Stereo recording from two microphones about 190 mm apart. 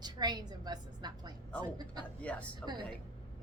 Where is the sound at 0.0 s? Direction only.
20° right (ahead or behind).